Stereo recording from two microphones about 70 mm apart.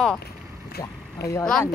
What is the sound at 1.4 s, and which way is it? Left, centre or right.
Speech, centre.